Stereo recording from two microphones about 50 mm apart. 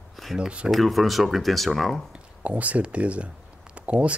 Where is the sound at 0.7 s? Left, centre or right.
Centre.